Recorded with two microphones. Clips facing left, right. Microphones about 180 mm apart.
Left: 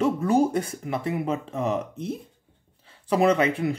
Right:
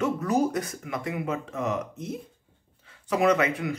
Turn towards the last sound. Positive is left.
turn(degrees=30)  # may be behind; listen again after turning